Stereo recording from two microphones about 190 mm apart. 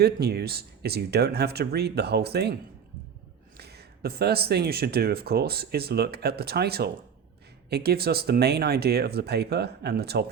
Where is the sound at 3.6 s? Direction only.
60° right (ahead or behind).